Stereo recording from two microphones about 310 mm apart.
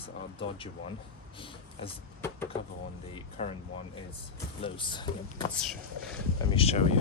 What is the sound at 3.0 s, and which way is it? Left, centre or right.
Speech, centre.